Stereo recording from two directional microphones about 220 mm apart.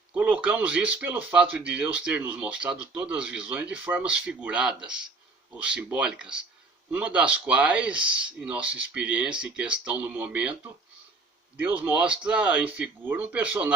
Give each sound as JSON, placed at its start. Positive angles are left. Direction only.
{"t": 0.1, "sound": "speech", "side_deg": -5}